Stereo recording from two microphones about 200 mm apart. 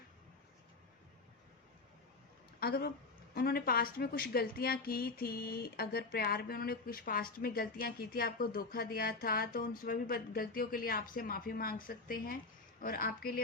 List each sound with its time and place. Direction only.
2.6 s speech: 50° left (ahead or behind)